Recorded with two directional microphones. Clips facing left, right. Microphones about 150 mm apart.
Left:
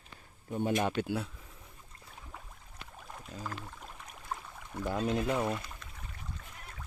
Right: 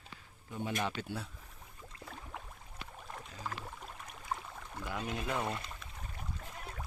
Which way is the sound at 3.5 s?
5° right (ahead or behind).